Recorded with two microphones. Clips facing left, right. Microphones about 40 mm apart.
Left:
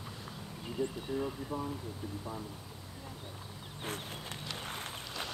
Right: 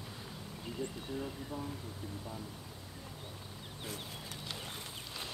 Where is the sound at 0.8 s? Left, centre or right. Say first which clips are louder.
Left 6 dB; centre.